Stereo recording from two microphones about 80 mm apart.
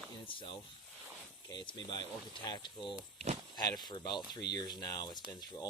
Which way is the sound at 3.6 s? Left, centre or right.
Left.